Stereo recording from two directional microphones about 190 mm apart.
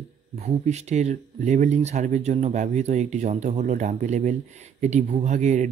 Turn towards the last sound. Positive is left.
turn(degrees=-40)  # may be behind; listen again after turning